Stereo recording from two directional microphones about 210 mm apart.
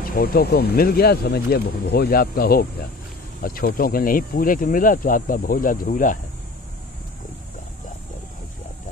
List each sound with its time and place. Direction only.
0.0 s speech: 45° left (ahead or behind)